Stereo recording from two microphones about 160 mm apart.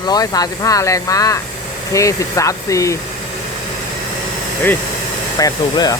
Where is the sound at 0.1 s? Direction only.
25° left (ahead or behind).